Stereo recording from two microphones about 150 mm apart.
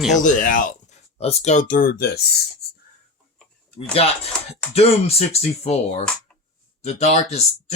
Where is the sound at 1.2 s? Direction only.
45° left (ahead or behind); by 2.2 s 85° left.